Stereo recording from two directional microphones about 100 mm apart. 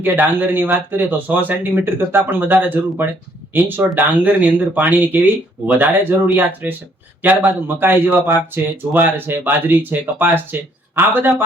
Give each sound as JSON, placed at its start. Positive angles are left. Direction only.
{"t": 0.0, "sound": "speech", "side_deg": -20}